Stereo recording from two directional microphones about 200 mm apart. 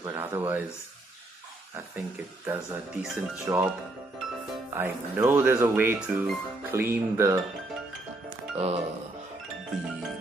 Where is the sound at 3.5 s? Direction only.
15° right (ahead or behind).